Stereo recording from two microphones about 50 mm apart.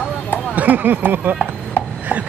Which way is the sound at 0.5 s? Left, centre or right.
Right.